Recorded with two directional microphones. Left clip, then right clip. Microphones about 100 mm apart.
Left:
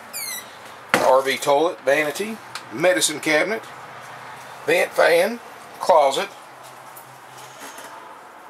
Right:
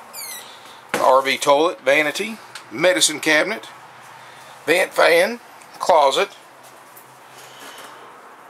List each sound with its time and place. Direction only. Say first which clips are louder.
1.1 s speech: right 2 dB; 40° right (ahead or behind)
4.6 s speech: right 1 dB; 40° right (ahead or behind)